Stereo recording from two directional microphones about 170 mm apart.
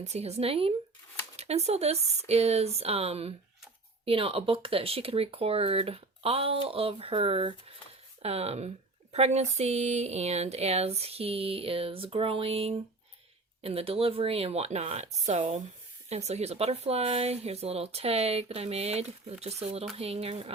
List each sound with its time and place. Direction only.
0.0 s speech: 40° right (ahead or behind)